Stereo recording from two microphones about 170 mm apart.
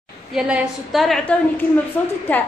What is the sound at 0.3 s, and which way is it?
A woman's voice, 5° right (ahead or behind).